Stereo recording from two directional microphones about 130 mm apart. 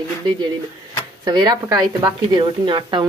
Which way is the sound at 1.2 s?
35° right (ahead or behind).